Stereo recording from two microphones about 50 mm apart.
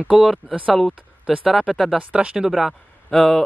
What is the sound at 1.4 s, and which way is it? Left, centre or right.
Speech, centre.